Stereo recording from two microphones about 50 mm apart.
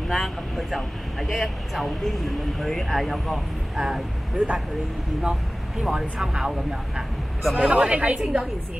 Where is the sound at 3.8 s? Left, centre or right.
Centre.